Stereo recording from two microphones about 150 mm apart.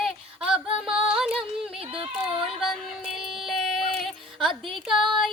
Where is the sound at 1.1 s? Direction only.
5° right (ahead or behind).